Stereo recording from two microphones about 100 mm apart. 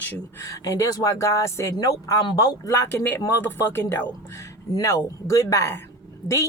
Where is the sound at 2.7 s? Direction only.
25° left (ahead or behind).